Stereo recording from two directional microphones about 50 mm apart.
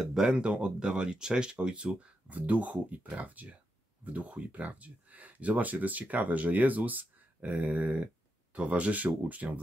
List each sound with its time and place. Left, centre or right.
0.0 s speech: centre; by 9.6 s right